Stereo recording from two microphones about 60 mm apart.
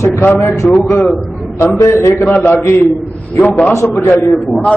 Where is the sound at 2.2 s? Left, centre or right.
Left.